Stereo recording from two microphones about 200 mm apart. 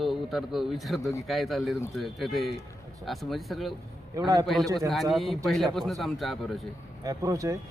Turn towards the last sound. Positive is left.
turn(degrees=-15)  # may be behind; listen again after turning